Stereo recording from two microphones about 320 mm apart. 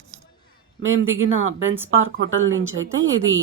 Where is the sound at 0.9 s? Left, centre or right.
Right.